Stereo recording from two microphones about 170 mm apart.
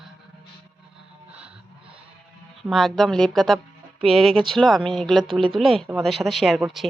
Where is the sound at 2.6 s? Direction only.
Centre (ahead or behind).